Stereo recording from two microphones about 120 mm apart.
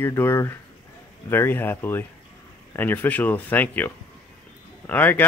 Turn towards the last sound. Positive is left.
turn(degrees=15)  # may be behind; listen again after turning